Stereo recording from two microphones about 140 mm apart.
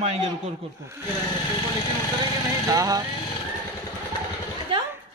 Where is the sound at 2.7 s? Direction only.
25° right (ahead or behind).